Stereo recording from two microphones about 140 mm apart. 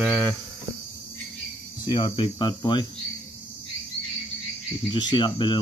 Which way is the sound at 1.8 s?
35° left (ahead or behind).